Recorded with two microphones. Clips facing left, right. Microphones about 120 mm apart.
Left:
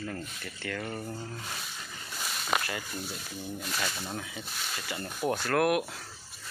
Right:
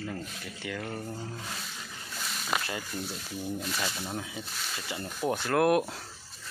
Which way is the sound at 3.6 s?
5° right (ahead or behind).